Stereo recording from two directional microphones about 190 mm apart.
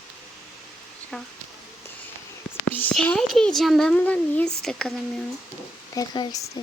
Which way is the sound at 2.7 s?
5° left (ahead or behind).